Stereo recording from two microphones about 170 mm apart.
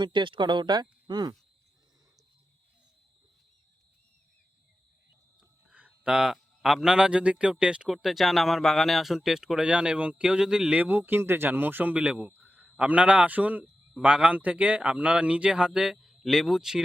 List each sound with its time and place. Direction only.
0.0 s speech: 30° right (ahead or behind)
5.4 s a man's voice: 5° right (ahead or behind)